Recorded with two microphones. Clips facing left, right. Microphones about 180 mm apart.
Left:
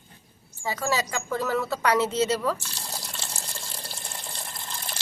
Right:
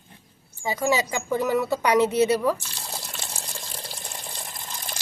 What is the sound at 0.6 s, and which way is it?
Speech, 15° right (ahead or behind).